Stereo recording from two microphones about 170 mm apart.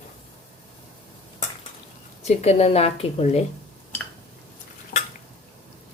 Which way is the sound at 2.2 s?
40° left (ahead or behind).